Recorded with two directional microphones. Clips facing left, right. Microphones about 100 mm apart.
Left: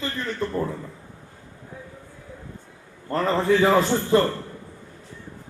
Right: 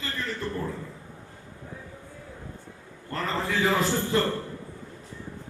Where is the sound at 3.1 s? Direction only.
30° left (ahead or behind).